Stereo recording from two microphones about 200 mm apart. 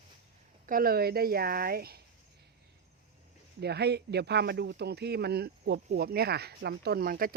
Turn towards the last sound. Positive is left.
turn(degrees=-45)  # may be behind; listen again after turning